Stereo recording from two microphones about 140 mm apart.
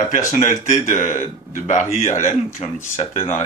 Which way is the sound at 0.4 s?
65° left (ahead or behind).